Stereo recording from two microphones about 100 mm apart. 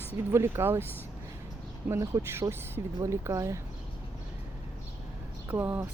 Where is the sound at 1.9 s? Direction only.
30° right (ahead or behind).